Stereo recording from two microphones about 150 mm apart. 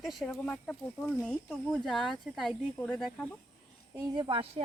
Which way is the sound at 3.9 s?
30° right (ahead or behind).